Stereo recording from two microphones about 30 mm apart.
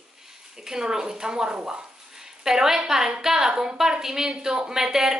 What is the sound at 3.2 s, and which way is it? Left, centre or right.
A woman's voice, centre.